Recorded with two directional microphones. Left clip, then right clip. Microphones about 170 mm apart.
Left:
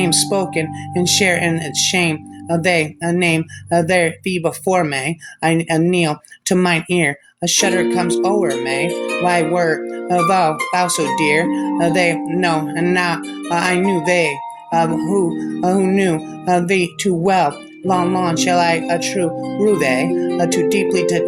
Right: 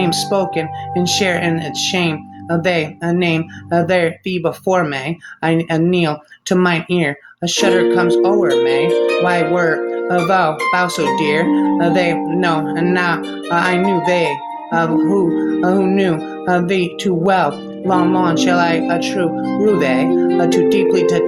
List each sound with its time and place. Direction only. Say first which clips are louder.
0.0 s speech: right 1 dB; 45° left (ahead or behind)